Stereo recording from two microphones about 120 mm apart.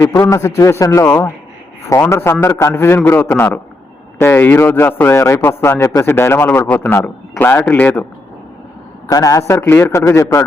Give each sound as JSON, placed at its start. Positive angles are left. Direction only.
{"t": 0.0, "sound": "a man's voice", "side_deg": 20}
{"t": 9.0, "sound": "speech", "side_deg": 30}